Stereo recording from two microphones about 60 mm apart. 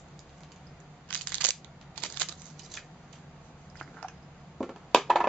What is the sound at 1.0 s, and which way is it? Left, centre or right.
Crushing, left.